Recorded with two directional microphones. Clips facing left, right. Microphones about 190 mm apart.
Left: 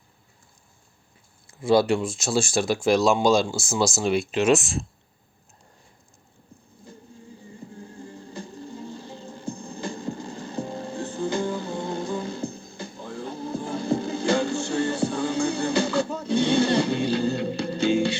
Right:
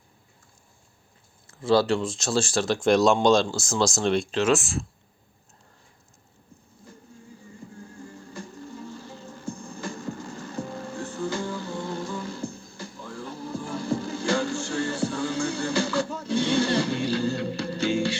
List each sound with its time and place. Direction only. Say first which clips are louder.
1.5 s speech: left 2 dB; 15° left (ahead or behind)
8.4 s music: left 2 dB; 20° left (ahead or behind)